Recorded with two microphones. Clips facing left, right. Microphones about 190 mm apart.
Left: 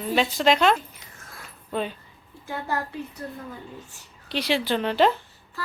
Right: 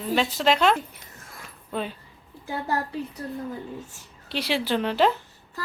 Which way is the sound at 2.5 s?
35° right (ahead or behind).